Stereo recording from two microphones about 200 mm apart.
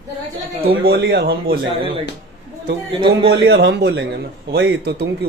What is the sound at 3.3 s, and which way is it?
Speech, 55° right (ahead or behind).